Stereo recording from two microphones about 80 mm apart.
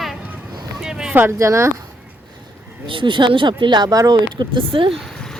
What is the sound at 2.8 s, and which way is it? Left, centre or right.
Speech, right.